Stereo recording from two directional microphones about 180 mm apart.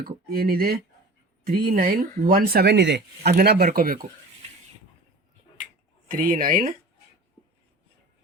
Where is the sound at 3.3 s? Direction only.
60° right (ahead or behind).